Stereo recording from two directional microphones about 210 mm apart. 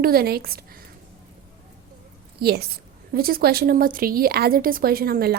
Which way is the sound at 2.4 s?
50° right (ahead or behind).